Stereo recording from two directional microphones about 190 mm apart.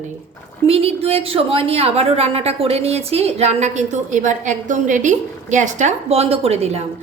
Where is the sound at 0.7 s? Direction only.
30° right (ahead or behind).